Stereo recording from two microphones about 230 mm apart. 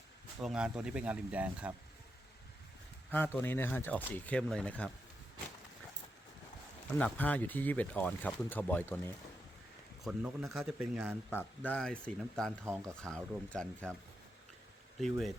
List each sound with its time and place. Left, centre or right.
0.4 s speech: centre
3.3 s speech: centre
7.0 s speech: centre
10.0 s speech: centre
11.3 s speech: centre
15.0 s speech: centre